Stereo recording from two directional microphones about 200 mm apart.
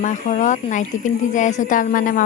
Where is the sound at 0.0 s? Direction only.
40° left (ahead or behind).